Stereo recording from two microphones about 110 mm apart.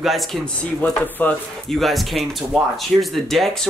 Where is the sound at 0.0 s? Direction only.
Centre (ahead or behind).